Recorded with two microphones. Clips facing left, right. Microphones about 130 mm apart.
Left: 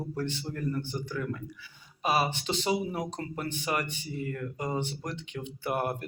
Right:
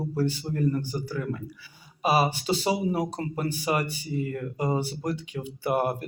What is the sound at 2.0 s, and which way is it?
Speech, 10° right (ahead or behind).